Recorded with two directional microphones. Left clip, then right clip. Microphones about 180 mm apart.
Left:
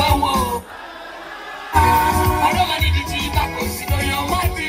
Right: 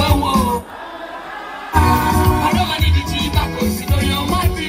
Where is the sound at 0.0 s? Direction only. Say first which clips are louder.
Even; 35° left (ahead or behind).